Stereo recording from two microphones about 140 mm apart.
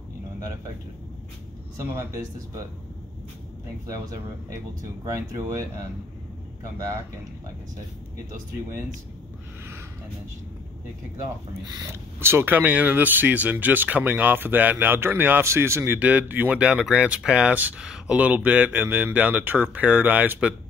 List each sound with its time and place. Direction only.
1.8 s speech: 20° right (ahead or behind)
3.8 s speech: 25° right (ahead or behind)
11.6 s speech: 25° right (ahead or behind)